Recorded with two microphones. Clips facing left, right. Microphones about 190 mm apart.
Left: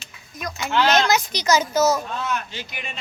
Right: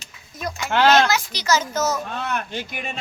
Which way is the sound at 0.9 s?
20° left (ahead or behind).